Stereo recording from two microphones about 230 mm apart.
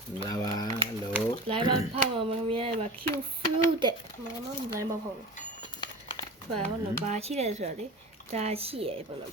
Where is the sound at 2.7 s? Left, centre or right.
Right.